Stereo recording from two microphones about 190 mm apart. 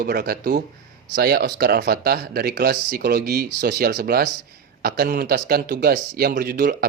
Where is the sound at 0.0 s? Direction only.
55° right (ahead or behind).